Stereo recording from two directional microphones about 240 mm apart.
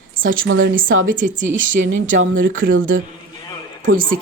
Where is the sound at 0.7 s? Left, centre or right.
Right.